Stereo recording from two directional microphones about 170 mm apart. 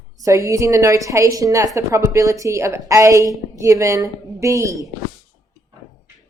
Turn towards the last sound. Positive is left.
turn(degrees=-20)  # may be behind; listen again after turning